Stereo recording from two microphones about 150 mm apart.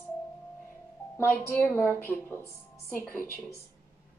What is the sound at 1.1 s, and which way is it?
A woman's voice, 15° left (ahead or behind).